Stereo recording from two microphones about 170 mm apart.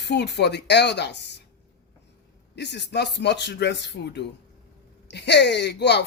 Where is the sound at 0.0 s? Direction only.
85° left.